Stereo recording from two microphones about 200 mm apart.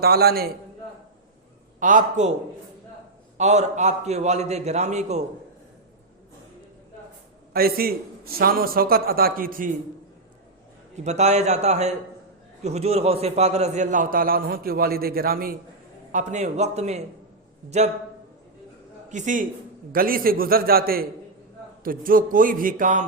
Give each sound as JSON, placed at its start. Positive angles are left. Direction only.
{"t": 0.0, "sound": "a man's voice", "side_deg": -50}
{"t": 1.8, "sound": "a man's voice", "side_deg": -40}
{"t": 3.3, "sound": "a man's voice", "side_deg": -35}
{"t": 7.5, "sound": "a man's voice", "side_deg": -50}
{"t": 10.9, "sound": "a man's voice", "side_deg": -35}
{"t": 16.1, "sound": "a man's voice", "side_deg": -35}
{"t": 19.1, "sound": "a man's voice", "side_deg": -40}